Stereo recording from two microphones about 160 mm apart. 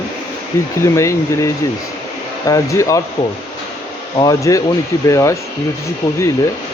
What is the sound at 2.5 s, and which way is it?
Speech, 20° left (ahead or behind).